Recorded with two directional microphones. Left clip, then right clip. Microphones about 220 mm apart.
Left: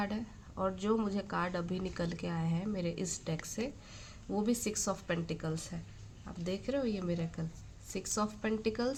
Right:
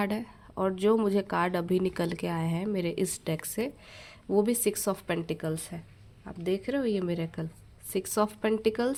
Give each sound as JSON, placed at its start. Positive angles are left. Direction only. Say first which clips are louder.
{"t": 0.0, "sound": "a woman's voice", "louder": "right 7 dB", "side_deg": -45}